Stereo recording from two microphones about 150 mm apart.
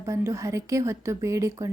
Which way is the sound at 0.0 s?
20° right (ahead or behind).